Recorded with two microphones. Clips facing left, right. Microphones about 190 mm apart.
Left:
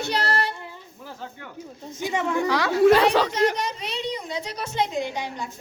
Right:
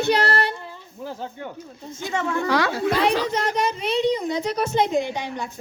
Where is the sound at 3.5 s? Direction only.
55° right (ahead or behind).